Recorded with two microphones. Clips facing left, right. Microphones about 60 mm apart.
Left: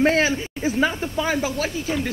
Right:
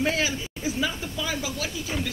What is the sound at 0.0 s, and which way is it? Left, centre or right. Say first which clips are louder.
Speech: left 7 dB; left.